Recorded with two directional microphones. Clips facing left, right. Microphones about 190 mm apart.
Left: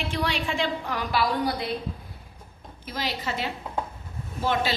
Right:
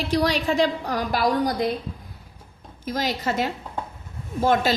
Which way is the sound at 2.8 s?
45° right (ahead or behind).